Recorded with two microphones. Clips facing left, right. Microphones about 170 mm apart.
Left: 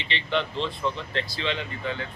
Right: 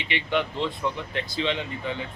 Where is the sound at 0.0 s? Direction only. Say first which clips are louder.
Right 1 dB; 15° right (ahead or behind).